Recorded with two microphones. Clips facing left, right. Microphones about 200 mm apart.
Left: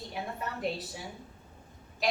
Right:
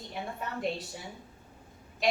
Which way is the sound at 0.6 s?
Centre (ahead or behind).